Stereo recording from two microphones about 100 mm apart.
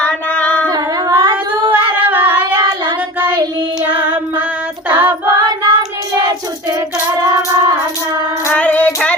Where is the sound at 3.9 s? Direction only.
15° right (ahead or behind).